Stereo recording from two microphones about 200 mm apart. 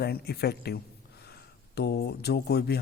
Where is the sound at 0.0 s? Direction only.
55° left (ahead or behind).